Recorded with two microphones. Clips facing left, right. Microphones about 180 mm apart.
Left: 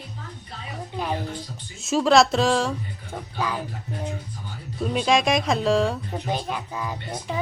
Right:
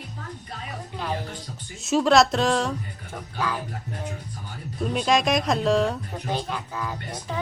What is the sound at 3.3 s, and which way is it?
Speech, 15° left (ahead or behind).